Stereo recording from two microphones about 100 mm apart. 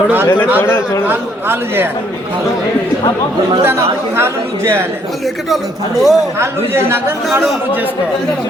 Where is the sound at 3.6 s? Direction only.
25° right (ahead or behind).